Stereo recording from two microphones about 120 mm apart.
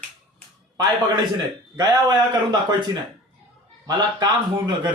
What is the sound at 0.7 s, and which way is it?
A man's voice, 35° right (ahead or behind).